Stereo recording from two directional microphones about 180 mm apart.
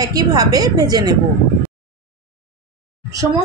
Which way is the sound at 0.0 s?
20° right (ahead or behind).